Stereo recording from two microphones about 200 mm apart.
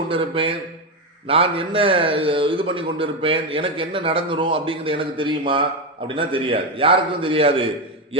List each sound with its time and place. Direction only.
0.1 s a man's voice: 25° right (ahead or behind)